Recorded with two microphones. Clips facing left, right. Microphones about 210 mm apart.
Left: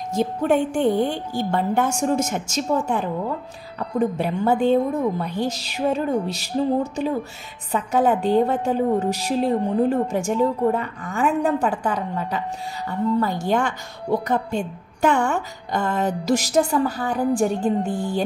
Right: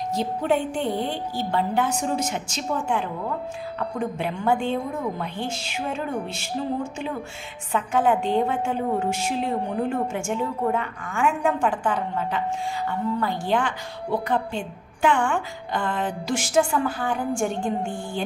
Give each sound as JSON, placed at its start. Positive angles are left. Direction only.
{"t": 0.1, "sound": "a woman's voice", "side_deg": 50}